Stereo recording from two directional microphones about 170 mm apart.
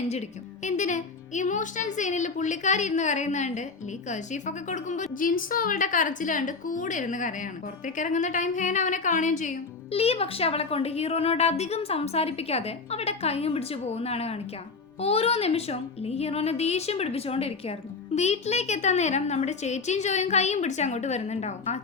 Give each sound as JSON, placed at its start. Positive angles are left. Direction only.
{"t": 0.1, "sound": "a woman's voice", "side_deg": 45}